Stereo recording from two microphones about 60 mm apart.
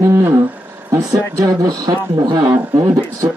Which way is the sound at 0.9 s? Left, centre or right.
Right.